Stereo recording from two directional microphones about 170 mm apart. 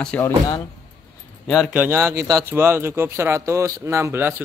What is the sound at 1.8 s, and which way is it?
Speech, 15° right (ahead or behind).